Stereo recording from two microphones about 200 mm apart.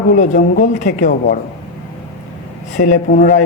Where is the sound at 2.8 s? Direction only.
45° left (ahead or behind).